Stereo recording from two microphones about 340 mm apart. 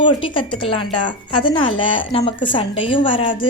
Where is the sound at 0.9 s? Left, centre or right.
Left.